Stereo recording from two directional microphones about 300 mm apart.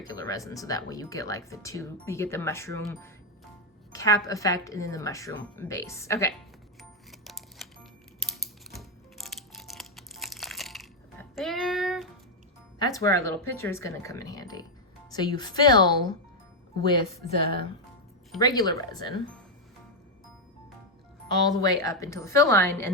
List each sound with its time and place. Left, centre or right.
0.1 s speech: centre
6.7 s music: centre
8.7 s music: centre
11.3 s child singing: centre
12.8 s speech: centre
17.3 s speech: right
18.3 s speech: centre
21.5 s speech: centre